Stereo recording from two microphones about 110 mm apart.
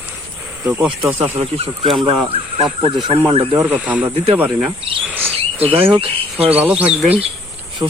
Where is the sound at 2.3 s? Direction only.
65° right (ahead or behind).